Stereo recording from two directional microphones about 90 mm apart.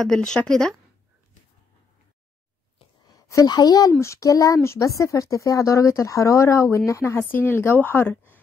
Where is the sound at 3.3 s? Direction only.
45° left (ahead or behind).